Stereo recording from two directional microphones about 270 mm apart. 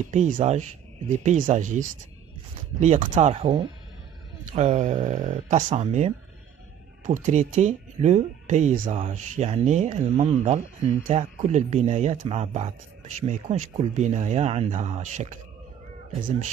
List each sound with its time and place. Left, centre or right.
0.1 s speech: right